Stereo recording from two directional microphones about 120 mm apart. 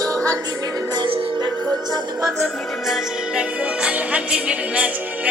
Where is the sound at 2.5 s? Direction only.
Centre (ahead or behind).